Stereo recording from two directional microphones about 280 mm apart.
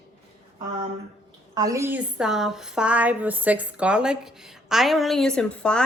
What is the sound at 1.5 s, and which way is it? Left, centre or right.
A woman's voice, centre.